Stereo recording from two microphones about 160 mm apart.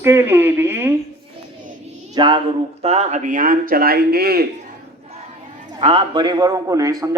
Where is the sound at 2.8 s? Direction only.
45° right (ahead or behind); by 4.4 s 75° right (ahead or behind).